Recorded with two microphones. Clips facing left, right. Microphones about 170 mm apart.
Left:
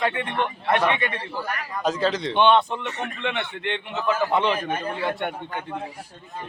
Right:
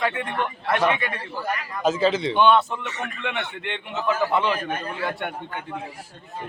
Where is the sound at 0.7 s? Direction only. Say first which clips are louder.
Even; 5° right (ahead or behind).